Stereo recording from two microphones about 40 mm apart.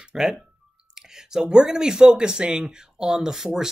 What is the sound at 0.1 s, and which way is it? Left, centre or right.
Speech, centre.